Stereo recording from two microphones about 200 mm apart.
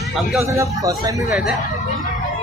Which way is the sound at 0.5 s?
15° right (ahead or behind).